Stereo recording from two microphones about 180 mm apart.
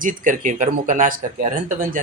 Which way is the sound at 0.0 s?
45° right (ahead or behind).